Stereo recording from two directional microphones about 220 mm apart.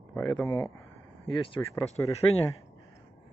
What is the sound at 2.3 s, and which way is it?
Speech, 65° left (ahead or behind).